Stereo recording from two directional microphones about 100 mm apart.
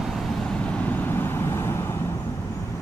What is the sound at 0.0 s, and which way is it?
Vehicle, centre (ahead or behind).